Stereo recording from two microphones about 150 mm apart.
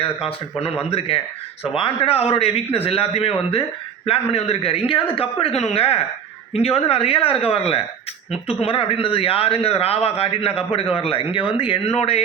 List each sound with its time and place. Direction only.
0.9 s a man's voice: 40° left (ahead or behind)